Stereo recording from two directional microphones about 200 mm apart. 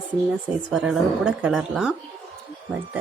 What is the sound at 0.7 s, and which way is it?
A woman's voice, 5° right (ahead or behind).